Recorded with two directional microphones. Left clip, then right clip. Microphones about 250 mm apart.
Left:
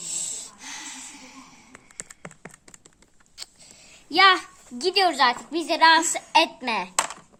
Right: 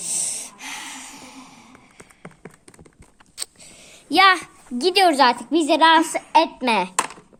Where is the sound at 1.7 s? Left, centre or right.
Centre.